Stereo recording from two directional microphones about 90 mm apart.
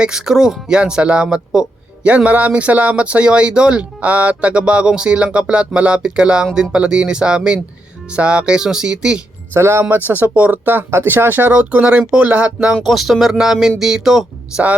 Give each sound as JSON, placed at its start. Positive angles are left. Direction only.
{"t": 0.0, "sound": "speech", "side_deg": -5}
{"t": 9.5, "sound": "speech", "side_deg": -30}